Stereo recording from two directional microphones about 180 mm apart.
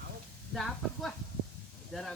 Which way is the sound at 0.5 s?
Centre (ahead or behind).